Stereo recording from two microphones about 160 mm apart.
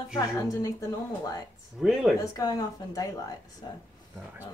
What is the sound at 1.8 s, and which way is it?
Speech, centre (ahead or behind).